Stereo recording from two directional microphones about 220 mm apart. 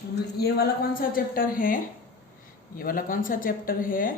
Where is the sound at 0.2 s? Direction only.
45° left (ahead or behind).